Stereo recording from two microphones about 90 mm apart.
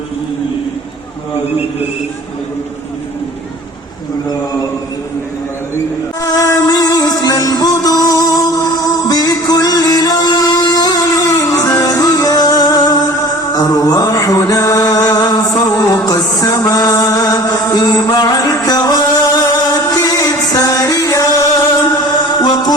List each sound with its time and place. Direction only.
6.2 s music: 40° left (ahead or behind)
22.4 s music: 50° left (ahead or behind)